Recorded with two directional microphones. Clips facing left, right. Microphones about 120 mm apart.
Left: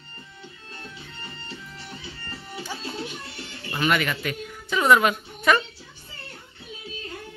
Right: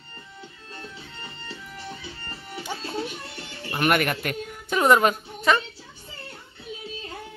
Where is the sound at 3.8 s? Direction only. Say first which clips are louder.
Right 1 dB; 55° right (ahead or behind).